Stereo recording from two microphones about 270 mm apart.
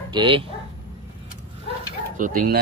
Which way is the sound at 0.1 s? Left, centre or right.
Centre.